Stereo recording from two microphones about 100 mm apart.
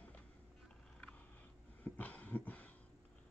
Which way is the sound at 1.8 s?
15° left (ahead or behind).